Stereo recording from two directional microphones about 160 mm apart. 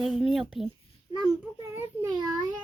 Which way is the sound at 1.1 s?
30° left (ahead or behind).